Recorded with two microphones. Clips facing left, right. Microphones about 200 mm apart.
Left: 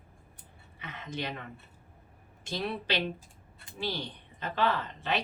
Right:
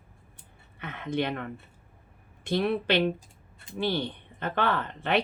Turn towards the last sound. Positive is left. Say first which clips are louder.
# right 5 dB
turn(degrees=-55)  # may be behind; listen again after turning